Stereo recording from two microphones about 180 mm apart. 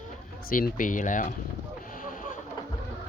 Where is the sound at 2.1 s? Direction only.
45° left (ahead or behind).